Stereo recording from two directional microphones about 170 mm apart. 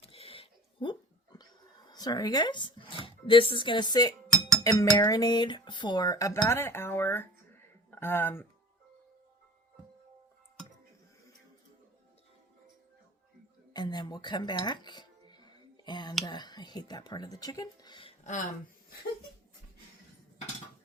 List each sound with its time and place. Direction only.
0.0 s sewing machine: 35° left (ahead or behind)
1.9 s speech: 25° left (ahead or behind)
4.6 s cutlery: 20° left (ahead or behind)
7.9 s speech: 15° left (ahead or behind)
13.7 s speech: 25° left (ahead or behind)
16.2 s cutlery: 25° left (ahead or behind)
18.2 s a sound: 45° left (ahead or behind)